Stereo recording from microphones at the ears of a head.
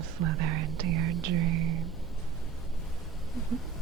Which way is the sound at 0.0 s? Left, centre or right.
Right.